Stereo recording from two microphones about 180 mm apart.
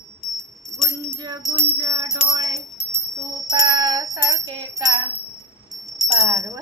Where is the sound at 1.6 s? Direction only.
20° right (ahead or behind).